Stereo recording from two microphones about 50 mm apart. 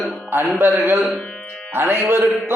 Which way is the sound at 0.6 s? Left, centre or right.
Right.